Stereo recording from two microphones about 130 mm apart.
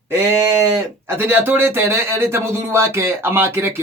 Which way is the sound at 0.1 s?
20° right (ahead or behind).